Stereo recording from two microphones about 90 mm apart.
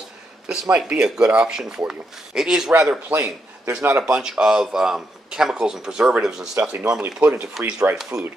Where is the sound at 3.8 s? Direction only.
30° right (ahead or behind).